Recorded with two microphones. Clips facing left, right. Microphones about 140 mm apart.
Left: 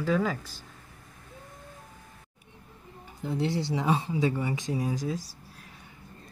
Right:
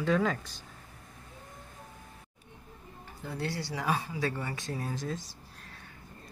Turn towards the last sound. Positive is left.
turn(degrees=10)  # may be behind; listen again after turning